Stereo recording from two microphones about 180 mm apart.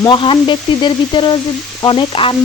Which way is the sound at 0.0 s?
25° left (ahead or behind).